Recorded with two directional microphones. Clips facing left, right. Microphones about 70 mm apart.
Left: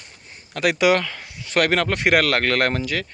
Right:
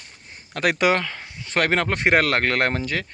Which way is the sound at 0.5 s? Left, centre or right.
Right.